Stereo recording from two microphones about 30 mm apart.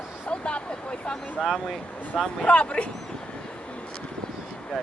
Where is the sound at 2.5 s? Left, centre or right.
Left.